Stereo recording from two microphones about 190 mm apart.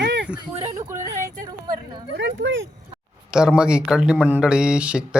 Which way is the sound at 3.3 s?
5° right (ahead or behind).